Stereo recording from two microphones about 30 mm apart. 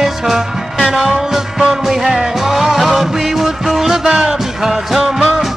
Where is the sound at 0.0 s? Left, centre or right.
Centre.